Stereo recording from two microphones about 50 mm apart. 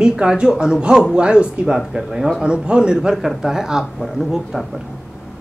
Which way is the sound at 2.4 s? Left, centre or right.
Centre.